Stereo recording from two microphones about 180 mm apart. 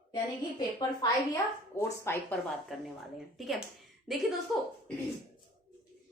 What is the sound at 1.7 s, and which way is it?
Speech, 15° left (ahead or behind).